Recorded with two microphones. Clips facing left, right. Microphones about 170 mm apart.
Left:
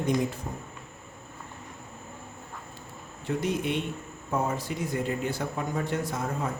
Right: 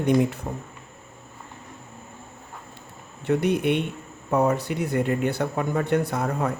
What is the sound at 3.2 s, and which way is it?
A man's voice, 65° right (ahead or behind).